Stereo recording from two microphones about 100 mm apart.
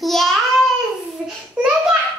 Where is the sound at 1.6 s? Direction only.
10° right (ahead or behind).